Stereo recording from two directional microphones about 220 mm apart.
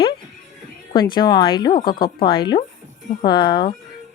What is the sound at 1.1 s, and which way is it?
Speech, 20° left (ahead or behind).